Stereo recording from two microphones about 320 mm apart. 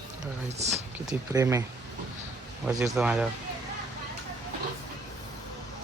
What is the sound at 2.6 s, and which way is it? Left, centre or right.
Speech, centre.